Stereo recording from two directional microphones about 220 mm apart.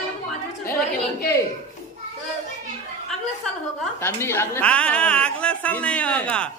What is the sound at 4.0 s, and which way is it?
A woman's voice, 10° left (ahead or behind).